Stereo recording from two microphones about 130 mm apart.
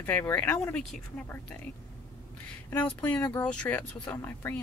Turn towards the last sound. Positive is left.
turn(degrees=15)  # may be behind; listen again after turning